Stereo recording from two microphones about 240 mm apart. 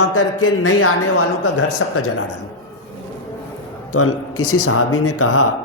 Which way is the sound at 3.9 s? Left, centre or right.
Left.